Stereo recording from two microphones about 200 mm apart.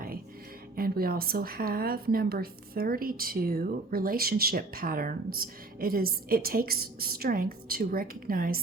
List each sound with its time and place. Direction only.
0.8 s a woman's voice: 50° right (ahead or behind)